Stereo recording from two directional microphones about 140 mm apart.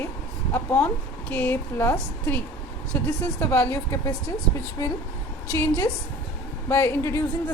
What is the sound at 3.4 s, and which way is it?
Speech, 20° left (ahead or behind).